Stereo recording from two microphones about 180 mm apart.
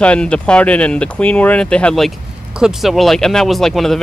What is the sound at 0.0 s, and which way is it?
Speech, 5° left (ahead or behind).